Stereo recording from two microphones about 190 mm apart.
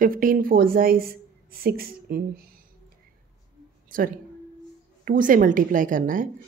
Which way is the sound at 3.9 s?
50° right (ahead or behind).